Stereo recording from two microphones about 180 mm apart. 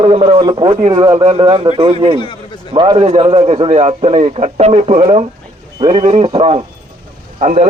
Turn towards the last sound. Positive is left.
turn(degrees=-40)  # may be behind; listen again after turning